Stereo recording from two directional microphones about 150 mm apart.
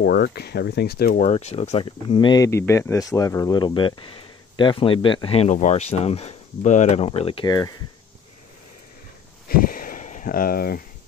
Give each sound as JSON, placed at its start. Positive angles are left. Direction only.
{"t": 0.0, "sound": "speech", "side_deg": 90}
{"t": 1.2, "sound": "speech", "side_deg": 45}
{"t": 1.9, "sound": "speech", "side_deg": 30}
{"t": 7.4, "sound": "speech", "side_deg": 25}
{"t": 9.5, "sound": "a sound", "side_deg": 70}